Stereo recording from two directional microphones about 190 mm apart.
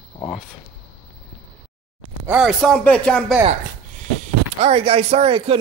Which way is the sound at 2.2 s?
5° right (ahead or behind).